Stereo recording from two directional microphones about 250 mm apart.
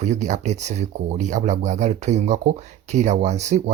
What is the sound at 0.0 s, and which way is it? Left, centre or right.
Speech, right.